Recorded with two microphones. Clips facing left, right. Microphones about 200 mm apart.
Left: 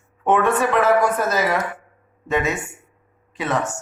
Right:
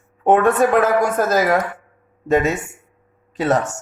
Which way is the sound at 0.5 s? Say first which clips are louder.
Right 2 dB; 40° right (ahead or behind).